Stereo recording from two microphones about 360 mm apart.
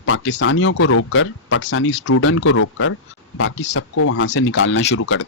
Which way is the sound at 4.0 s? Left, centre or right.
Left.